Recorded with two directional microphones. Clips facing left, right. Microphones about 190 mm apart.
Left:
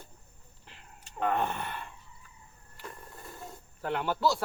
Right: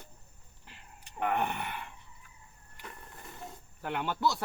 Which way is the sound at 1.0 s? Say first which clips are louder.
Left 1 dB; 15° right (ahead or behind).